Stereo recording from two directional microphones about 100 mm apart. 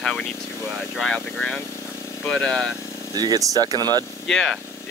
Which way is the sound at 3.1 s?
40° right (ahead or behind).